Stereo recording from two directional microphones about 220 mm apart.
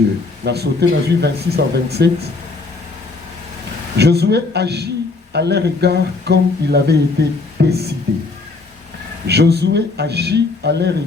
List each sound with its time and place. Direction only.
0.4 s speech: 50° right (ahead or behind)
3.9 s speech: 50° right (ahead or behind)
9.2 s speech: 50° right (ahead or behind)